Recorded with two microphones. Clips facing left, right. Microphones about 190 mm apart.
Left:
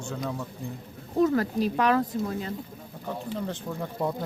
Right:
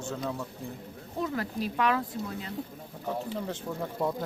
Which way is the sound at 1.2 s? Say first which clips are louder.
Left 8 dB; 45° left (ahead or behind).